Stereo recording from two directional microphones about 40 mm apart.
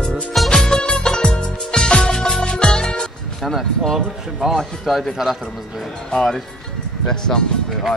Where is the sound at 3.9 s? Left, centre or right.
Centre.